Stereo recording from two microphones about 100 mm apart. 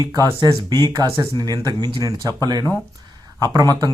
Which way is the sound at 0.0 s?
40° right (ahead or behind).